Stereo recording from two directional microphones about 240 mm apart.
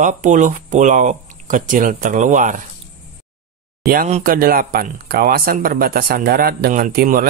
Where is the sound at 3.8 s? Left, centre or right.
Right.